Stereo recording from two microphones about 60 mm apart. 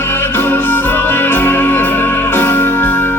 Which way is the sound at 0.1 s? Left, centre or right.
Left.